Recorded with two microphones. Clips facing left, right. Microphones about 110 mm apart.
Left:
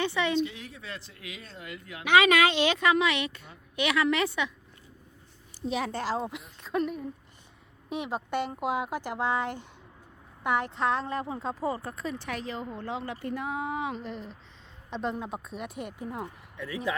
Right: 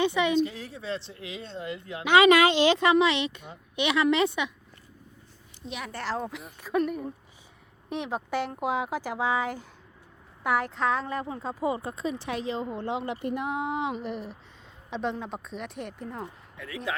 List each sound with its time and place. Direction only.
0.0 s speech: 15° right (ahead or behind)
0.3 s speech: 40° right (ahead or behind); by 4.5 s 20° right (ahead or behind)
5.6 s a woman's voice: 35° left (ahead or behind)
5.9 s speech: 15° left (ahead or behind)
11.6 s speech: 15° right (ahead or behind)
14.8 s speech: centre (ahead or behind)